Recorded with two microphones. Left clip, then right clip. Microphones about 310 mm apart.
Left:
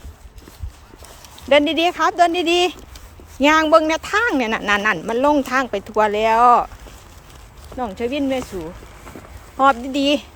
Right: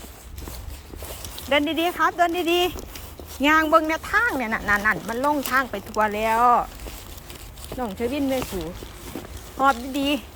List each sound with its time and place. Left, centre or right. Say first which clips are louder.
1.5 s speech: left 7 dB; centre
7.8 s speech: left 4 dB; centre
9.6 s speech: left 5 dB; centre